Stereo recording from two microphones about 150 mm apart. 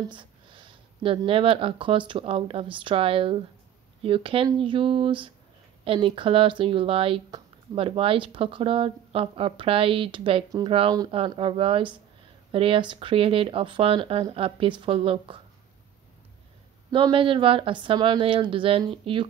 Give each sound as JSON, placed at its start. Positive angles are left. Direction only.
{"t": 0.1, "sound": "a sound", "side_deg": -35}
{"t": 1.0, "sound": "speech", "side_deg": -35}
{"t": 16.9, "sound": "speech", "side_deg": -35}